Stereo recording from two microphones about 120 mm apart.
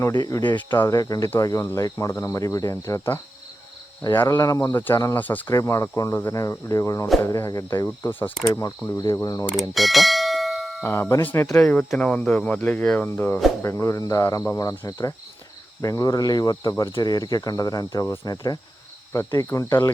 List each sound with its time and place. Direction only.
0.0 s speech: 25° left (ahead or behind)
4.4 s speech: 30° left (ahead or behind)
5.1 s speech: 15° left (ahead or behind)
5.5 s speech: 25° left (ahead or behind)
8.4 s speech: 25° left (ahead or behind)
9.6 s bell: centre (ahead or behind)
10.8 s speech: 20° left (ahead or behind)
15.8 s cricket: 30° left (ahead or behind)
19.3 s speech: 25° left (ahead or behind)